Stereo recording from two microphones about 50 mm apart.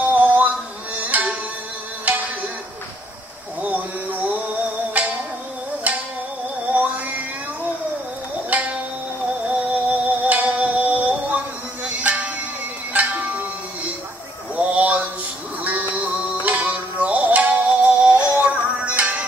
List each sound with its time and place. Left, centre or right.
0.1 s music: right
3.6 s a sound: right
5.9 s music: right
8.5 s music: right
14.5 s a sound: right
15.6 s music: right